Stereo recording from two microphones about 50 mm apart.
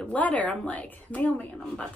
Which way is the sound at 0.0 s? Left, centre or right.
Left.